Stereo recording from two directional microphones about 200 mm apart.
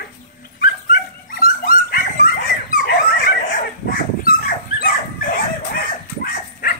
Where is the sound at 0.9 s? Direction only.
45° left (ahead or behind).